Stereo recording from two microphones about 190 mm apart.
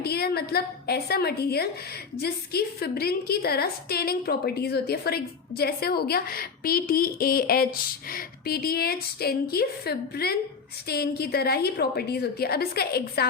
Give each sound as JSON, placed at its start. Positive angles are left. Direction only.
{"t": 0.0, "sound": "a woman's voice", "side_deg": 55}